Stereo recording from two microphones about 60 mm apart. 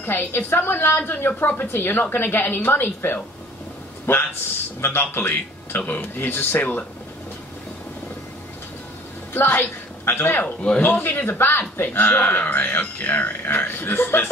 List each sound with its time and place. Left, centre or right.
0.0 s a man's voice: left
9.3 s a woman's voice: left
10.4 s a man's voice: centre
11.0 s speech: left